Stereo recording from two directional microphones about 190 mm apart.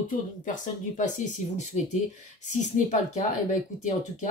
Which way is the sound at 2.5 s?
40° left (ahead or behind).